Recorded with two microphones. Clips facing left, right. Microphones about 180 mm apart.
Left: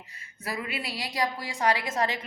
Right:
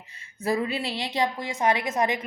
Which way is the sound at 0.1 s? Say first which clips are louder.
Right 10 dB; 25° right (ahead or behind).